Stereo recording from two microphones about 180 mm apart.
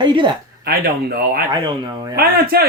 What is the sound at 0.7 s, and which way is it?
Speech, 60° right (ahead or behind).